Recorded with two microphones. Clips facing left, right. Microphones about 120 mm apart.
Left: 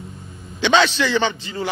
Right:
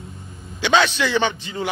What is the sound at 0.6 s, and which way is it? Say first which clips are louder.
A man's voice: left 1 dB; 10° right (ahead or behind).